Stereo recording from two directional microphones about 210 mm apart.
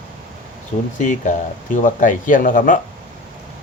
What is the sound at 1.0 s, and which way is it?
Speech, 35° left (ahead or behind).